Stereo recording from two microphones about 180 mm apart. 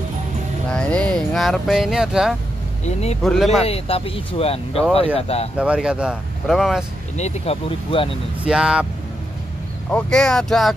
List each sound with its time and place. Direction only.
0.7 s speech: 5° left (ahead or behind)
3.6 s speech: 30° left (ahead or behind)
5.6 s speech: 5° right (ahead or behind)
7.2 s speech: 35° left (ahead or behind)
8.5 s speech: 5° right (ahead or behind)
9.8 s speech: 5° left (ahead or behind)